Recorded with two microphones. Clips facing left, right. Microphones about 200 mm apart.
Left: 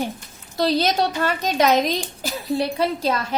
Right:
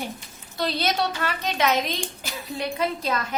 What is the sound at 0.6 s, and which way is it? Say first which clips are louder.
A woman's voice: left 5 dB; 40° left (ahead or behind).